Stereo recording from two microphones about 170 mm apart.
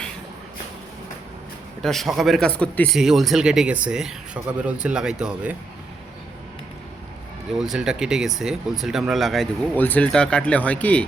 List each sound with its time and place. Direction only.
1.8 s speech: centre (ahead or behind)
7.6 s speech: 5° right (ahead or behind)